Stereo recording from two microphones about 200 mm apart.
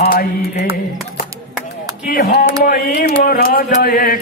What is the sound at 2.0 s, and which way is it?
A man's voice, 50° left (ahead or behind).